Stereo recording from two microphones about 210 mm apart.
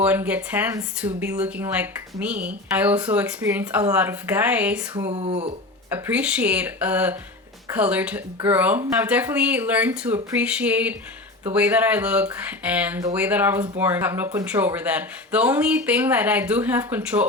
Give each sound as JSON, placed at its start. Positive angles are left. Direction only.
{"t": 0.0, "sound": "speech", "side_deg": -5}
{"t": 5.0, "sound": "speech", "side_deg": -30}
{"t": 5.9, "sound": "speech", "side_deg": -5}